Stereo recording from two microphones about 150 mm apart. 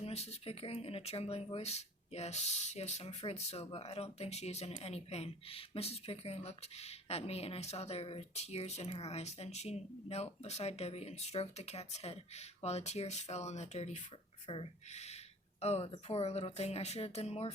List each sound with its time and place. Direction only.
0.0 s speech: 45° left (ahead or behind)